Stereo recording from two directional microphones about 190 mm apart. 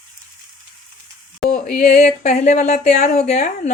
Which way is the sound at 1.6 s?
50° left (ahead or behind).